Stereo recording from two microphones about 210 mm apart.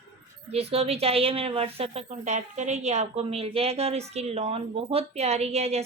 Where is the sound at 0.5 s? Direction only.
30° right (ahead or behind).